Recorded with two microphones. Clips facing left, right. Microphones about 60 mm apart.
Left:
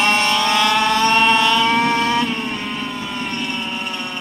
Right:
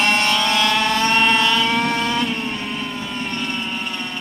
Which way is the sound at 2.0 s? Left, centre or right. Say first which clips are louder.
Left 3 dB; left.